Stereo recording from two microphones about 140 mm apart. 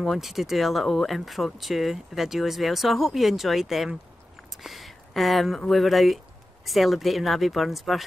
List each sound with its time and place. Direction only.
0.0 s speech: centre (ahead or behind)